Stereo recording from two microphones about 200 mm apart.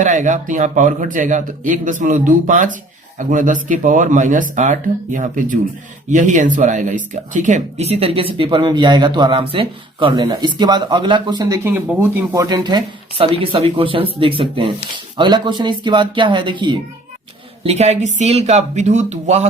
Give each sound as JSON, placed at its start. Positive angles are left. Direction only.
{"t": 0.0, "sound": "speech", "side_deg": -40}